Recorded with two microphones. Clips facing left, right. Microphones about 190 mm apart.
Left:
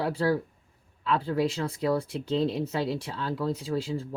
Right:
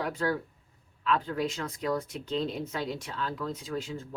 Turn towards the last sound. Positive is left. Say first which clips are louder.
# left 5 dB
turn(degrees=35)  # may be behind; listen again after turning